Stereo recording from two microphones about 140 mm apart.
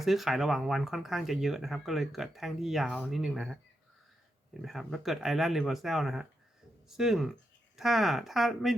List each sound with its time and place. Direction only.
0.0 s speech: centre (ahead or behind)
4.6 s speech: centre (ahead or behind)